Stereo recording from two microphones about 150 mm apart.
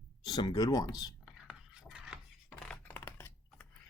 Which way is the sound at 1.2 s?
5° right (ahead or behind).